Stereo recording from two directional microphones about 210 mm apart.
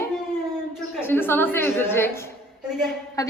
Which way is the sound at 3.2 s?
15° left (ahead or behind).